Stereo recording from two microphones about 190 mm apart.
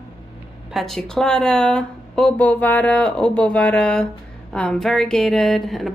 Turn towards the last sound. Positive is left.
turn(degrees=0)  # may be behind; listen again after turning